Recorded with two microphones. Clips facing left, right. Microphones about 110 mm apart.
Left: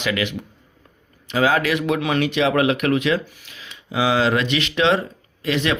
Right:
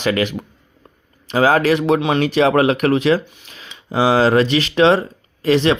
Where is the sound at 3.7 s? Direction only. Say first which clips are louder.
Right 4 dB; 35° right (ahead or behind).